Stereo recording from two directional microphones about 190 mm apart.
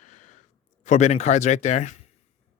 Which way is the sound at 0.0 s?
40° left (ahead or behind).